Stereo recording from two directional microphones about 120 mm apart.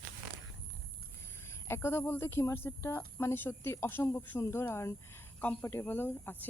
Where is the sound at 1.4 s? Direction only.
20° left (ahead or behind).